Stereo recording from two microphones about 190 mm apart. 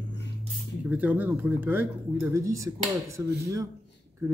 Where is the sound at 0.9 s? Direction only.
10° right (ahead or behind).